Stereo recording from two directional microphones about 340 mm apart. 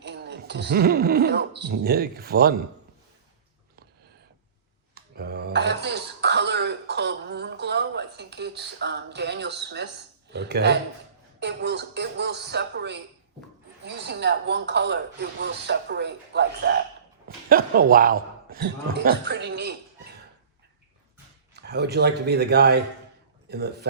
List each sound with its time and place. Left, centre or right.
0.0 s speech: right
4.9 s throat clearing: right
10.3 s a man's voice: right
21.5 s a man's voice: right